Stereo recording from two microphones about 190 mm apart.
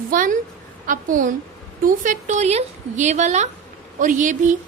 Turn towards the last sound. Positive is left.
turn(degrees=-40)  # may be behind; listen again after turning